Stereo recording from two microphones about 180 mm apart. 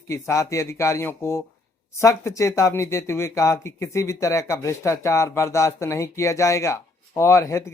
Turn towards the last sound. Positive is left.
turn(degrees=15)  # may be behind; listen again after turning